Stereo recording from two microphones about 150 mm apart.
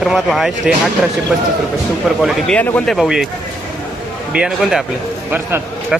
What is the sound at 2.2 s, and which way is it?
Speech, 5° left (ahead or behind).